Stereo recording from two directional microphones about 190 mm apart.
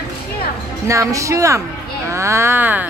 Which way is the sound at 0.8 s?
15° right (ahead or behind).